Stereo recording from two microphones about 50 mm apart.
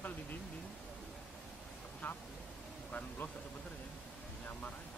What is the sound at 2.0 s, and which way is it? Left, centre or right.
Speech, left.